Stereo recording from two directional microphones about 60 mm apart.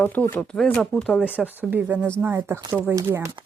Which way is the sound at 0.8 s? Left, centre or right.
Centre.